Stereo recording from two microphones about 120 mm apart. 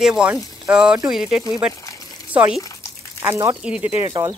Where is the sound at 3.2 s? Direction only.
25° right (ahead or behind).